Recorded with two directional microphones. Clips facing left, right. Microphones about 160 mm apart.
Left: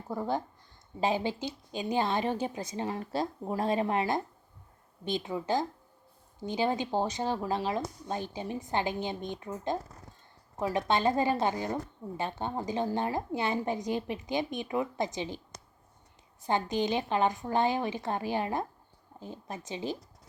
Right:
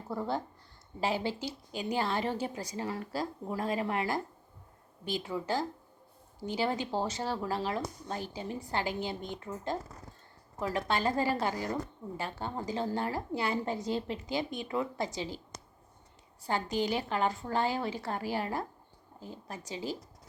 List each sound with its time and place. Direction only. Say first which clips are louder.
0.1 s a woman's voice: left 2 dB; 15° left (ahead or behind)
16.4 s a woman's voice: left 2 dB; 20° left (ahead or behind)